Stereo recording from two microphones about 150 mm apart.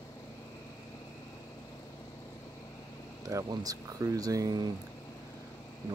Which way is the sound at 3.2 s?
25° right (ahead or behind).